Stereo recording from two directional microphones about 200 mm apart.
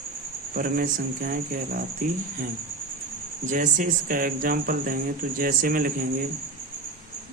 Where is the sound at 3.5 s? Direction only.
40° right (ahead or behind).